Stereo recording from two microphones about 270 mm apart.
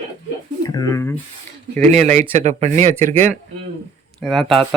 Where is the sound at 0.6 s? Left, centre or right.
Centre.